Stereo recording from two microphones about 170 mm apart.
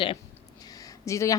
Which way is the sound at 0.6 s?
20° left (ahead or behind).